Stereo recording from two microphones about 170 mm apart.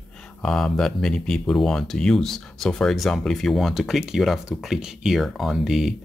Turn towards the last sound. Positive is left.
turn(degrees=0)  # may be behind; listen again after turning